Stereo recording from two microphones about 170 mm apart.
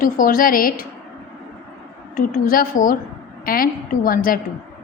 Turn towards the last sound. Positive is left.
turn(degrees=55)  # may be behind; listen again after turning